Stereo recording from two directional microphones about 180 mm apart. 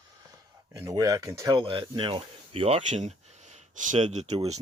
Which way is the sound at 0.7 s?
15° right (ahead or behind).